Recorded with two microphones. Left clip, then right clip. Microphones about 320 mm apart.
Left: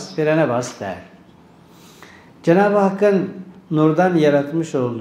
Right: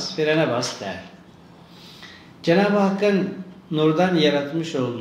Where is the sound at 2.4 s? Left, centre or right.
Left.